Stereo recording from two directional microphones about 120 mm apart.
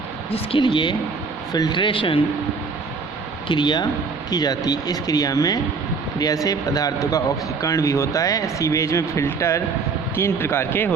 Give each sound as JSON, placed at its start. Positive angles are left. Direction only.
{"t": 0.3, "sound": "speech", "side_deg": 50}
{"t": 3.5, "sound": "speech", "side_deg": 40}